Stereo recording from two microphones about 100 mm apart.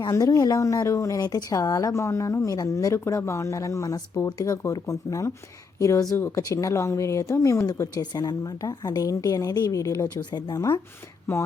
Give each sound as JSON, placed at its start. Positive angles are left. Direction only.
{"t": 0.0, "sound": "a woman's voice", "side_deg": 35}